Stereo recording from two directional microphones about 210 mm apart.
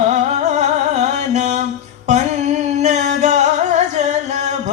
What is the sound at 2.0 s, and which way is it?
Singing, 35° right (ahead or behind).